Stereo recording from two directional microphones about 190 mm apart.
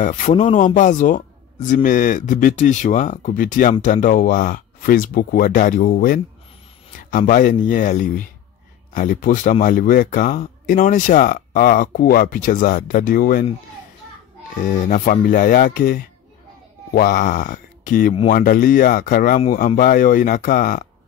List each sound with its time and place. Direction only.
0.0 s a man's voice: 40° left (ahead or behind)
14.6 s a man's voice: 45° left (ahead or behind)